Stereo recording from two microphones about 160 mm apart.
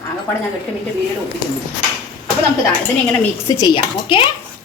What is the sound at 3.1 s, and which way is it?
Speech, 20° left (ahead or behind).